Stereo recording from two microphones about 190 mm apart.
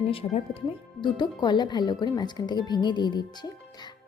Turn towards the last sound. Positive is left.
turn(degrees=20)  # may be behind; listen again after turning